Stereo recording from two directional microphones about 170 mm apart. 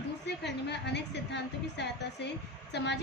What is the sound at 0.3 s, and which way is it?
A woman's voice, 90° left.